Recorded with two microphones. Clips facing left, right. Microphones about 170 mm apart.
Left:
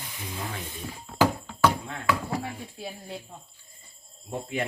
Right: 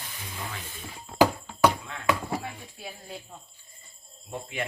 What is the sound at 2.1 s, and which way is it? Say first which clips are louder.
Speech: even; 20° right (ahead or behind).